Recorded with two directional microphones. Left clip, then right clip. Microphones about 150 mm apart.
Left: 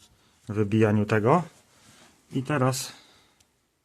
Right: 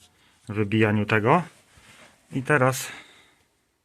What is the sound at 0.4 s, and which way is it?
Speech, 15° left (ahead or behind).